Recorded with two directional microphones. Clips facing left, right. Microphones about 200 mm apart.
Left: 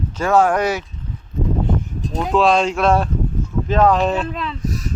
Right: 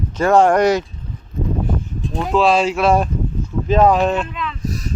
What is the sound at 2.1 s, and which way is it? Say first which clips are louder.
Speech: even; centre (ahead or behind).